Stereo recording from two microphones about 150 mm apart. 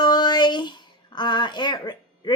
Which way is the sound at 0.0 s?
30° left (ahead or behind).